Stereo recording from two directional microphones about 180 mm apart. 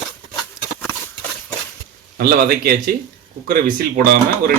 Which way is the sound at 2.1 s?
55° right (ahead or behind).